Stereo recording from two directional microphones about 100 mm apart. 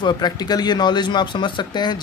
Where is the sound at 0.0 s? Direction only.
45° left (ahead or behind).